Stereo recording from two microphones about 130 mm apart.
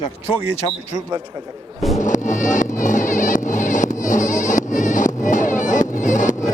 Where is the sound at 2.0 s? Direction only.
75° left (ahead or behind).